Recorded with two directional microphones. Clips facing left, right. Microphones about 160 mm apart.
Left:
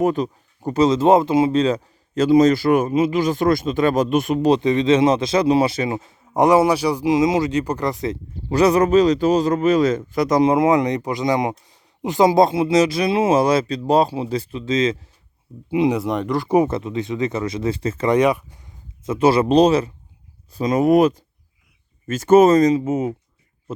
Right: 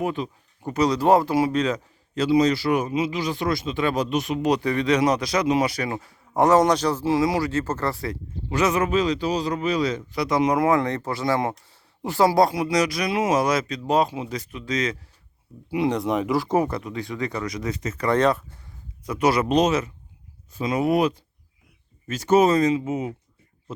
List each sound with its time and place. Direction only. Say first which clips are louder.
0.0 s speech: left 7 dB; 40° left (ahead or behind)
0.8 s speech: left 4 dB; 20° left (ahead or behind)
2.1 s speech: left 5 dB; 45° left (ahead or behind)
4.4 s speech: left 5 dB; 30° left (ahead or behind)
8.4 s speech: left 7 dB; 35° left (ahead or behind)
10.5 s speech: left 4 dB; 20° left (ahead or behind)
15.9 s speech: left 2 dB; centre (ahead or behind)
16.5 s speech: left 5 dB; 20° left (ahead or behind)
18.1 s speech: left 3 dB; 10° left (ahead or behind)
19.0 s speech: left 5 dB; 25° left (ahead or behind); by 23.1 s 45° left (ahead or behind)